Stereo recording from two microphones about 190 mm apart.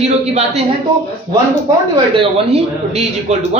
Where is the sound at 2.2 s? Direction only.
35° right (ahead or behind).